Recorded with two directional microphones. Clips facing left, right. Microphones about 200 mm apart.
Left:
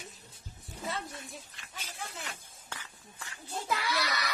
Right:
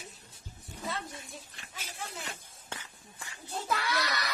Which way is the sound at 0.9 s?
Centre (ahead or behind).